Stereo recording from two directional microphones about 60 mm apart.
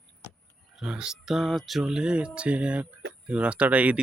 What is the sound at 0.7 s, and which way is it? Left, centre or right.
Speech, centre.